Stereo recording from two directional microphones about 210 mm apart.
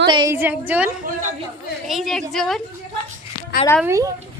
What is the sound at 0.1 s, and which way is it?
Speech, 15° right (ahead or behind).